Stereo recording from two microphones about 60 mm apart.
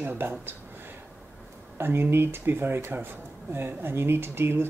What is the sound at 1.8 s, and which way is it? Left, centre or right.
Speech, right.